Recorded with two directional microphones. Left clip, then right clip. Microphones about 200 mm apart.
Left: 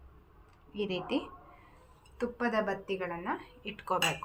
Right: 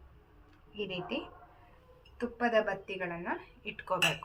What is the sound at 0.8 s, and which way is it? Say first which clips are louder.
Speech: left 3 dB; 35° left (ahead or behind).